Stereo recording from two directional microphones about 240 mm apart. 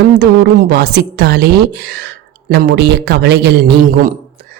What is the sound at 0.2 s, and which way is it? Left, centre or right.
A woman's voice, right.